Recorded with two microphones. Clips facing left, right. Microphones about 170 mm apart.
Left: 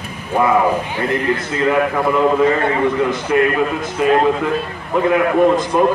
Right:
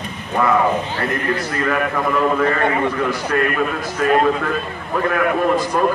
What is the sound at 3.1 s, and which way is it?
A man's voice, 20° left (ahead or behind).